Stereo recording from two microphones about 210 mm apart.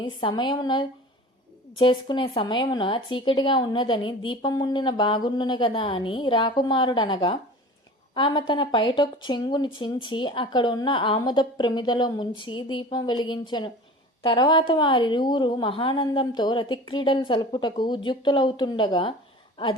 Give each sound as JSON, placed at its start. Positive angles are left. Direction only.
{"t": 0.0, "sound": "a woman's voice", "side_deg": 25}